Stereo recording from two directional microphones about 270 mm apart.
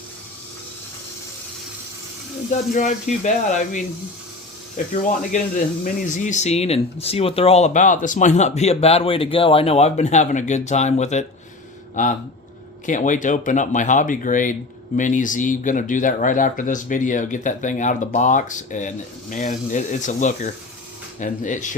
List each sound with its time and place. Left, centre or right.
2.5 s speech: left
5.0 s speech: left